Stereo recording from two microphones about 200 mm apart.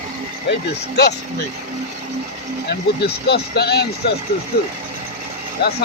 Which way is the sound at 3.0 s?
55° left (ahead or behind).